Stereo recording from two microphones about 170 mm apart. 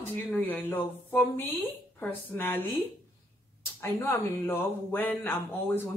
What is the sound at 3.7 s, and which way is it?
Speech, 15° left (ahead or behind).